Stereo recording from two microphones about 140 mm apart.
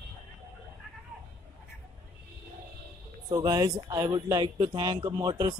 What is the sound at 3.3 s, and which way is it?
Speech, 25° right (ahead or behind).